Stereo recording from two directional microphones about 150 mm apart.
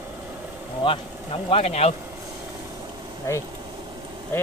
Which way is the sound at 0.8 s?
40° left (ahead or behind).